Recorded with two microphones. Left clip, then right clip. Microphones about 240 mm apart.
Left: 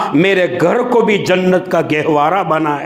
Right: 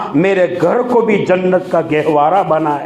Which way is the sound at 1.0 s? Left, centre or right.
Left.